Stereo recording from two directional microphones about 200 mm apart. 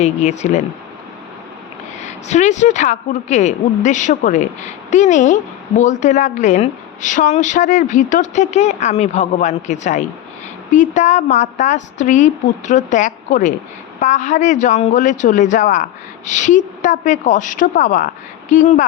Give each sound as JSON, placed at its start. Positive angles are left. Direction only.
{"t": 0.0, "sound": "speech", "side_deg": 35}
{"t": 2.0, "sound": "speech", "side_deg": 35}